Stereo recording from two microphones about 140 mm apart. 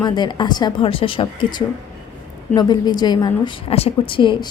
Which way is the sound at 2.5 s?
30° left (ahead or behind).